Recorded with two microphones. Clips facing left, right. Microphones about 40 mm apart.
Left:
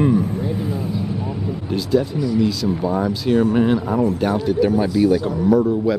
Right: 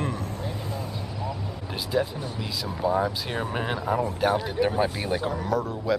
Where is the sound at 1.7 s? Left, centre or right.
Centre.